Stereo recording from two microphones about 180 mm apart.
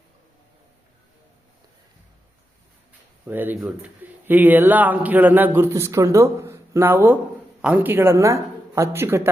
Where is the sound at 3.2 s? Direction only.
10° right (ahead or behind).